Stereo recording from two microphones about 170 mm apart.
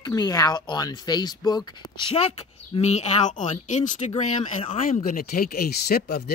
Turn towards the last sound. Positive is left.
turn(degrees=65)  # may be behind; listen again after turning